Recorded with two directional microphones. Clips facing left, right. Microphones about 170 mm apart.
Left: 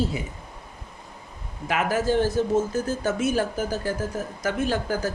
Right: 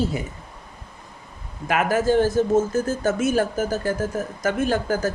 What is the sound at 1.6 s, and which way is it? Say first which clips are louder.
Speech: right 3 dB; 50° right (ahead or behind).